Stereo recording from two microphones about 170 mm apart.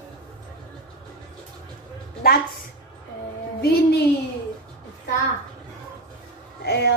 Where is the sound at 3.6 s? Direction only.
70° left (ahead or behind).